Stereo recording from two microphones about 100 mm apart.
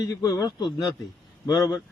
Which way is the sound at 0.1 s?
35° left (ahead or behind).